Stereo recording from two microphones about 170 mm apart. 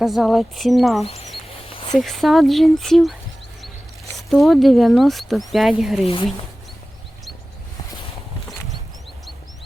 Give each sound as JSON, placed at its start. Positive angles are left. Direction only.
{"t": 0.0, "sound": "speech", "side_deg": 0}
{"t": 1.0, "sound": "speech", "side_deg": 35}
{"t": 1.6, "sound": "a sound", "side_deg": 30}
{"t": 2.0, "sound": "speech", "side_deg": 0}
{"t": 4.3, "sound": "speech", "side_deg": 0}